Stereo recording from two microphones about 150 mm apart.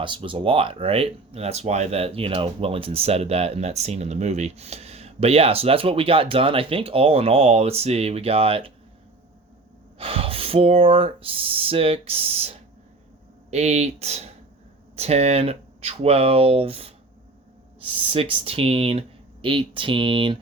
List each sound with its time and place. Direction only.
0.0 s speech: 35° right (ahead or behind)
10.0 s speech: 40° right (ahead or behind)
13.5 s speech: 45° right (ahead or behind)